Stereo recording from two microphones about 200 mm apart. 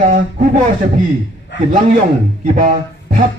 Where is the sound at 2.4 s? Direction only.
40° right (ahead or behind).